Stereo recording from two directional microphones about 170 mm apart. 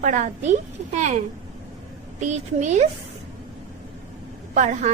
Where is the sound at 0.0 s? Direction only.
45° right (ahead or behind).